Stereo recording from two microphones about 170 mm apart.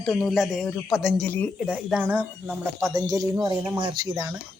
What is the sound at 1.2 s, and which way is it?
Speech, 10° left (ahead or behind).